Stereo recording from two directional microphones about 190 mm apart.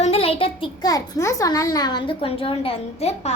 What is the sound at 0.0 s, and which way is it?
A child's voice, 30° left (ahead or behind).